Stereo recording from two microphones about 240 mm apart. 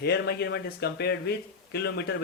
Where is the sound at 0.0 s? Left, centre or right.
Left.